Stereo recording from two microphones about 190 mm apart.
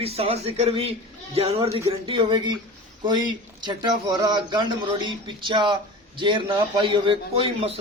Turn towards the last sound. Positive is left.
turn(degrees=-30)  # may be behind; listen again after turning